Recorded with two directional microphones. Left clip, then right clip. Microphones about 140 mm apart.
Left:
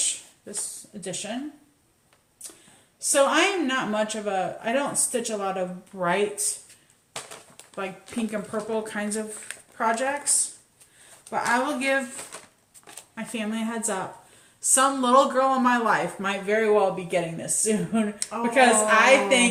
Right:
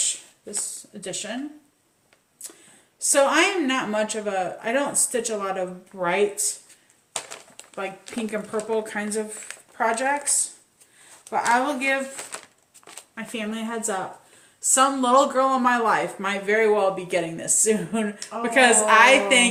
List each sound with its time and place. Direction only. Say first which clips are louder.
1.0 s speech: right 1 dB; 25° right (ahead or behind)
3.0 s speech: right 2 dB; 25° right (ahead or behind)
8.1 s speech: right 2 dB; 25° right (ahead or behind)
11.5 s speech: right 1 dB; 20° right (ahead or behind)